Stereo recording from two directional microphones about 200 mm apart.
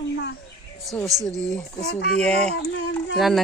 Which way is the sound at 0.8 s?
Centre (ahead or behind).